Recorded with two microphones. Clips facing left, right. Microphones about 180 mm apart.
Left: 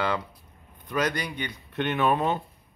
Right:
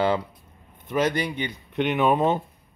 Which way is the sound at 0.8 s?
25° right (ahead or behind).